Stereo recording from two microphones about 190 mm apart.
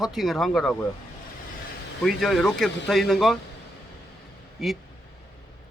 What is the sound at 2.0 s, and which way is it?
A man's voice, centre (ahead or behind).